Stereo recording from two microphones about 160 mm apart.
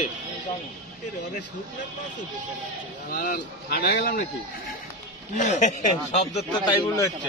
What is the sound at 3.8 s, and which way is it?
Speech, 90° left.